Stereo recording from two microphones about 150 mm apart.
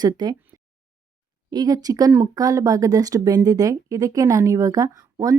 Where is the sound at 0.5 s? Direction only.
25° right (ahead or behind).